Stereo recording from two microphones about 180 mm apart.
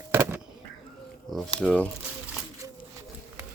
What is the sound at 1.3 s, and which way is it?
Speech, centre (ahead or behind).